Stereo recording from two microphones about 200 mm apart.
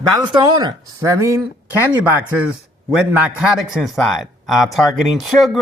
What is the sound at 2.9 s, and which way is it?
A man's voice, 5° right (ahead or behind).